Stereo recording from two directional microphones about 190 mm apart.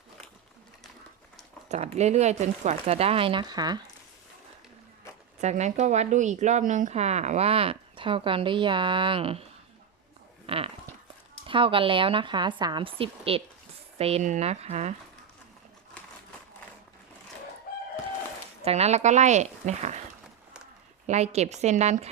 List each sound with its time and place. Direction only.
1.7 s speech: 35° right (ahead or behind)
5.4 s speech: 35° right (ahead or behind)
10.4 s a sound: 30° right (ahead or behind)
11.4 s speech: 30° right (ahead or behind)
17.7 s crowing: 50° left (ahead or behind)
18.6 s speech: 35° right (ahead or behind)
21.1 s speech: 35° right (ahead or behind)